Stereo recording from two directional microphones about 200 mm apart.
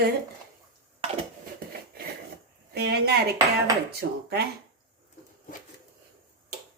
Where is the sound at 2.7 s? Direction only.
55° right (ahead or behind).